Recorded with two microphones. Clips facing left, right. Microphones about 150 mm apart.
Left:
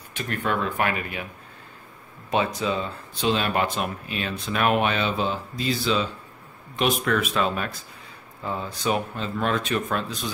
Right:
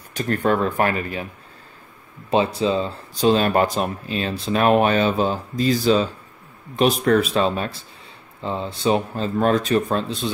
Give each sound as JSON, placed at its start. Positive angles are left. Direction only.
{"t": 0.1, "sound": "speech", "side_deg": -40}
{"t": 2.3, "sound": "speech", "side_deg": -30}